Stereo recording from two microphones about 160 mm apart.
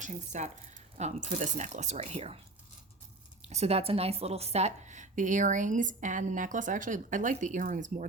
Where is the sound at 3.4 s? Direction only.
45° right (ahead or behind).